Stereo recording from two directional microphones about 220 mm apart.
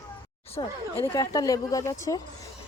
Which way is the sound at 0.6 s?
20° left (ahead or behind).